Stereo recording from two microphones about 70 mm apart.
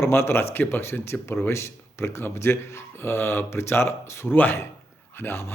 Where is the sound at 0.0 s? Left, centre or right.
Left.